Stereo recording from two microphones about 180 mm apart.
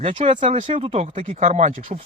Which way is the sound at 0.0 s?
35° right (ahead or behind).